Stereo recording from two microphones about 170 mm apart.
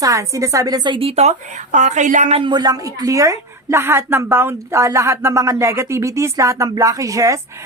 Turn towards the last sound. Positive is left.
turn(degrees=-20)  # may be behind; listen again after turning